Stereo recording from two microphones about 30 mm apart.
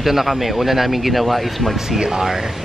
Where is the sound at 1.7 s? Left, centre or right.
Centre.